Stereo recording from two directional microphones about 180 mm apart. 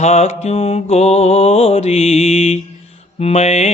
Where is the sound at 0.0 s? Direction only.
35° left (ahead or behind).